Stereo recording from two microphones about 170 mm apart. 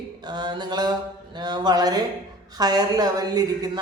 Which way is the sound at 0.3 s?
25° right (ahead or behind).